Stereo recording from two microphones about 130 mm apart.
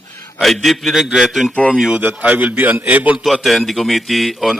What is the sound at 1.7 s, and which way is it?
A man's voice, 5° right (ahead or behind).